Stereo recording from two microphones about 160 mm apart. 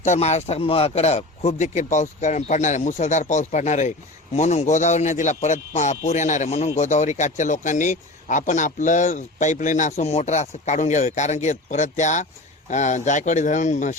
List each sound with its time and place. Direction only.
0.0 s speech: 45° left (ahead or behind)